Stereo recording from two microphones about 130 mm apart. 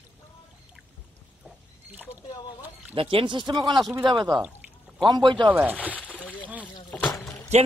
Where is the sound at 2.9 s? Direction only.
45° right (ahead or behind).